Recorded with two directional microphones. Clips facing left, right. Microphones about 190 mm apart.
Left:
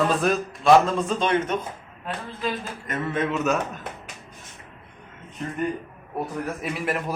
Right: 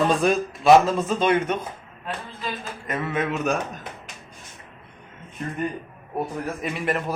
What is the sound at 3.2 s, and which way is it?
Speech, 55° right (ahead or behind).